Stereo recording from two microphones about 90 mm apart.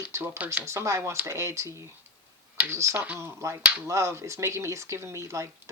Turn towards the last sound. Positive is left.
turn(degrees=-35)  # may be behind; listen again after turning